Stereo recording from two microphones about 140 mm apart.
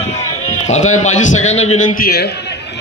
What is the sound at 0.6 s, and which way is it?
A man's voice, 55° left (ahead or behind).